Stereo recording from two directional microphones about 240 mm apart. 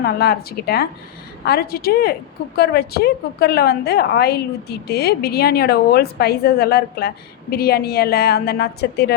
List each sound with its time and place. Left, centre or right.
0.0 s a woman's voice: left